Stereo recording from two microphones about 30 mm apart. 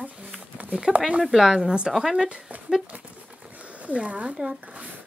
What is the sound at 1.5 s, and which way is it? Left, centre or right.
Speech, centre.